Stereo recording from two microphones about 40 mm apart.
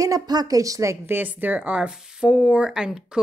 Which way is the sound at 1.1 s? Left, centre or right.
Right.